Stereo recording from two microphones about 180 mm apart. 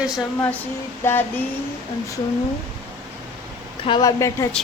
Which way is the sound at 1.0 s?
10° left (ahead or behind).